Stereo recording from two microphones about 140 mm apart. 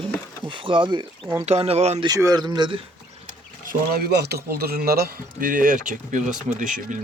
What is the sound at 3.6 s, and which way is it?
Speech, 90° right.